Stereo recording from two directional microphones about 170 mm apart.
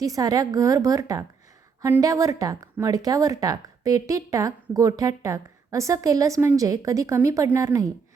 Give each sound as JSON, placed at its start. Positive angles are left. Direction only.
{"t": 0.0, "sound": "speech", "side_deg": -20}